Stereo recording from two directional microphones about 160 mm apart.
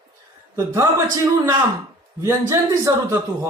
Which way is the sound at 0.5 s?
15° right (ahead or behind).